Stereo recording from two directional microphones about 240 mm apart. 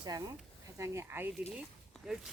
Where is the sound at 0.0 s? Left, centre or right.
Centre.